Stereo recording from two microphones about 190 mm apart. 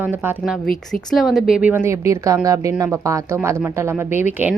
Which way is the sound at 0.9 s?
Centre (ahead or behind).